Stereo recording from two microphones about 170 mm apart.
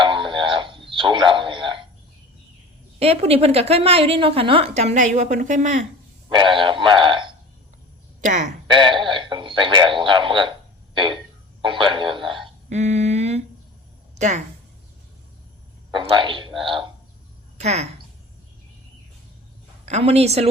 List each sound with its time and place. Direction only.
0.0 s a sound: 30° right (ahead or behind)
3.0 s a woman's voice: 35° right (ahead or behind)
6.2 s speech: 30° right (ahead or behind)
8.2 s speech: 45° right (ahead or behind)
8.6 s speech: 30° right (ahead or behind)
10.0 s frog: 30° right (ahead or behind)
11.6 s radio: 30° right (ahead or behind)
12.6 s a sound: 40° right (ahead or behind)
14.2 s a woman's voice: 45° right (ahead or behind)
16.0 s a man's voice: 30° right (ahead or behind)
17.6 s speech: 40° right (ahead or behind)
19.8 s a woman's voice: 40° right (ahead or behind)